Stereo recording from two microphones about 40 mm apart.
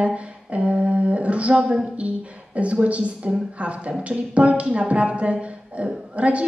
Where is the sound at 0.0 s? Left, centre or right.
Right.